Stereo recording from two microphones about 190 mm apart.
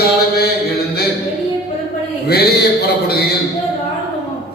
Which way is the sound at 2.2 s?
55° left (ahead or behind).